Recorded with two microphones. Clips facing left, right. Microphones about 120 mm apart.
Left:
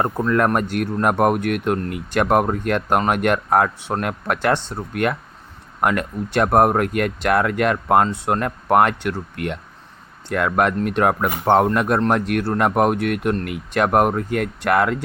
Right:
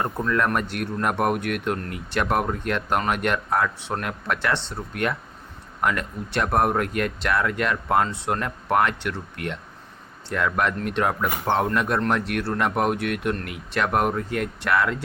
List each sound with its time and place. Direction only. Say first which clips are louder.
0.0 s speech: left 5 dB; 40° left (ahead or behind)